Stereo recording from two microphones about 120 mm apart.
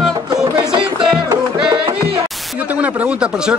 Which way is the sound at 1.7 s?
45° right (ahead or behind).